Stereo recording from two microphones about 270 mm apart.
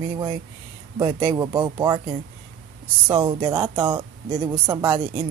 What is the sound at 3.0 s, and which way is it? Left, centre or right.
Speech, centre.